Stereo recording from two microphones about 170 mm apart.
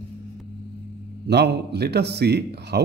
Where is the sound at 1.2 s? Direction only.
80° right.